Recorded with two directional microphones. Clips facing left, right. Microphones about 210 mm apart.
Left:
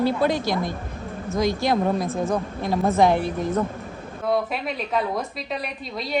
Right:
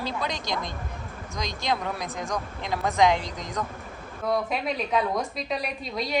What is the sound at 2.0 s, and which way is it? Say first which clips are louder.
Speech: left 8 dB; 15° right (ahead or behind).